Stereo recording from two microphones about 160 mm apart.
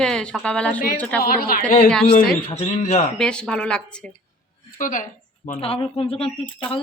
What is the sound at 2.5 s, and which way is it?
Speech, 40° left (ahead or behind).